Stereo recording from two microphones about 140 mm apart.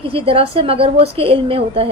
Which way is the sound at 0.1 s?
40° right (ahead or behind).